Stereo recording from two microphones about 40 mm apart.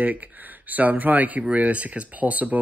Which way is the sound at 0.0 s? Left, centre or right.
Right.